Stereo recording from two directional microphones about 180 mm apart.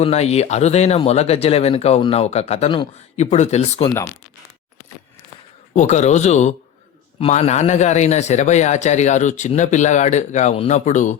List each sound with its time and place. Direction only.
0.0 s a man's voice: 35° left (ahead or behind)
5.7 s a man's voice: 40° left (ahead or behind)